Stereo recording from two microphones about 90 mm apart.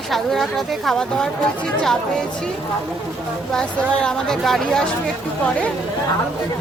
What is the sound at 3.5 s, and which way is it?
Speech, 10° left (ahead or behind).